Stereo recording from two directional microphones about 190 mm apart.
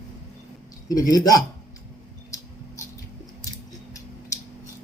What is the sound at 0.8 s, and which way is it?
Speech, 20° left (ahead or behind).